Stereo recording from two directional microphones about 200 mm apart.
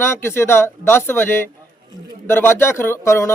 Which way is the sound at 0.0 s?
10° left (ahead or behind).